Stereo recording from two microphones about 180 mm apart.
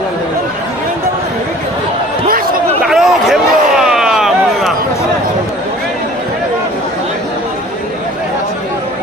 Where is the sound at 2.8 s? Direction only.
Centre (ahead or behind).